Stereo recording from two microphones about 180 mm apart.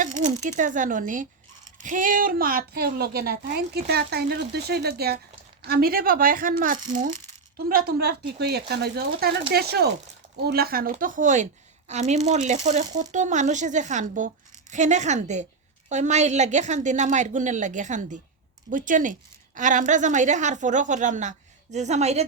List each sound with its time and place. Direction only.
0.0 s a woman's voice: 45° right (ahead or behind)